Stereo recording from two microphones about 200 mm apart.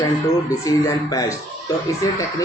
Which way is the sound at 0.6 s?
15° left (ahead or behind).